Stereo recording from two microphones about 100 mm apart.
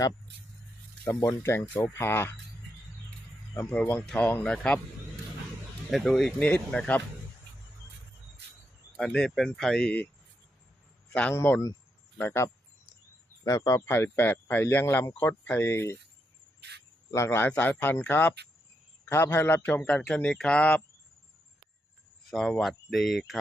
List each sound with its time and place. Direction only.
1.0 s speech: 30° left (ahead or behind)
3.7 s speech: 15° left (ahead or behind)
5.9 s speech: centre (ahead or behind)
9.0 s speech: 5° left (ahead or behind)
11.1 s a man's voice: 10° left (ahead or behind)
11.3 s speech: 20° left (ahead or behind)
17.1 s speech: 30° left (ahead or behind)
20.1 s speech: 5° left (ahead or behind)
22.3 s speech: 5° left (ahead or behind)